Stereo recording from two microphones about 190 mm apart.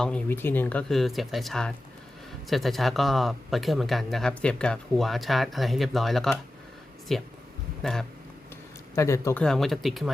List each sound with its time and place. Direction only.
0.0 s speech: 10° left (ahead or behind)
9.0 s speech: 15° left (ahead or behind)
9.4 s speech: centre (ahead or behind)